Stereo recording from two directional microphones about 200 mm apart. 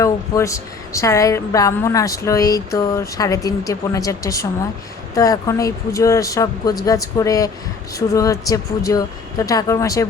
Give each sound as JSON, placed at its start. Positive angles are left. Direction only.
{"t": 0.0, "sound": "a woman's voice", "side_deg": 15}